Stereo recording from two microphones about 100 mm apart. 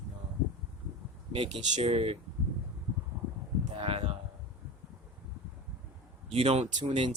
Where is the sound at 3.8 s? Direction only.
70° right (ahead or behind).